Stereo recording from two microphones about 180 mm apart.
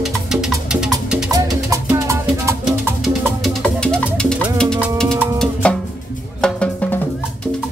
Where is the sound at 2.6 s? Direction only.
Centre (ahead or behind).